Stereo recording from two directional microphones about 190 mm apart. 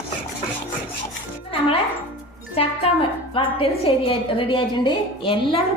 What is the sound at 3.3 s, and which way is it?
A woman's voice, 30° left (ahead or behind).